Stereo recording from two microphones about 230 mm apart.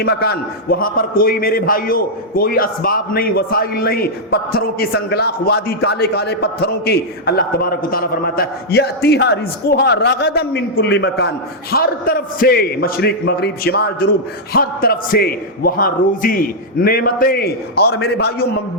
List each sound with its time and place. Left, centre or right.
0.0 s a man's voice: left